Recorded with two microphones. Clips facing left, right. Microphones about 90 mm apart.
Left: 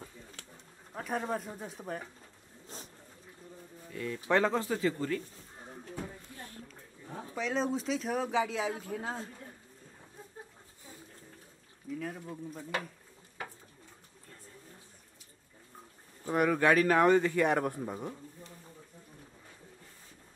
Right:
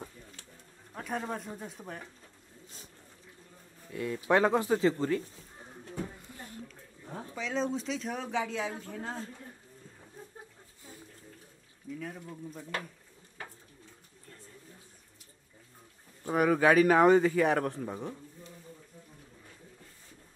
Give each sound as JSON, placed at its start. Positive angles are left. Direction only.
{"t": 0.9, "sound": "speech", "side_deg": 0}
{"t": 3.9, "sound": "speech", "side_deg": -15}
{"t": 7.3, "sound": "speech", "side_deg": 0}
{"t": 12.0, "sound": "speech", "side_deg": 0}
{"t": 16.3, "sound": "speech", "side_deg": -5}
{"t": 17.3, "sound": "speech", "side_deg": 0}